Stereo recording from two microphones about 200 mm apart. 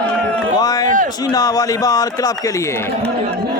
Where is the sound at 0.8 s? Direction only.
40° right (ahead or behind).